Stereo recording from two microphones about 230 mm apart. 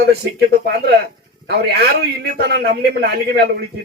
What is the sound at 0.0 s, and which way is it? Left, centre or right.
Speech, right.